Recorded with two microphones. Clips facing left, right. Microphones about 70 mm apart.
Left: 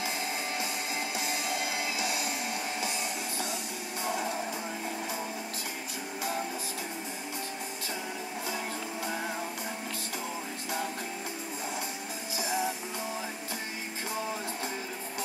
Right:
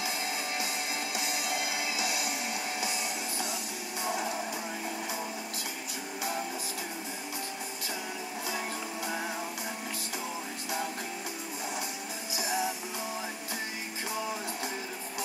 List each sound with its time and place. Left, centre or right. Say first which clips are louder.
2.0 s music: even; left
4.0 s music: even; centre
8.5 s music: right 1 dB; centre
12.4 s music: even; centre